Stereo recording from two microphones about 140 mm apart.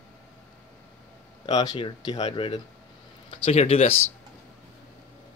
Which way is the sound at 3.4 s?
45° left (ahead or behind).